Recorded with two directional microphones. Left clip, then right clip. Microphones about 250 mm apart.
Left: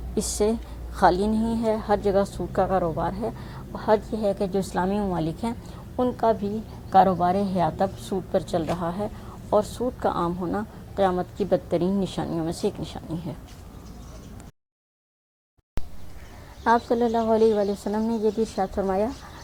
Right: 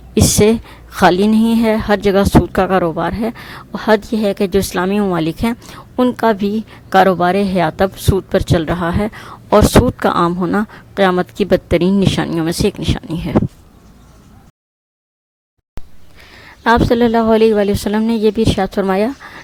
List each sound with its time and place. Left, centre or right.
0.1 s a woman's voice: right
16.6 s a woman's voice: right
18.3 s speech: right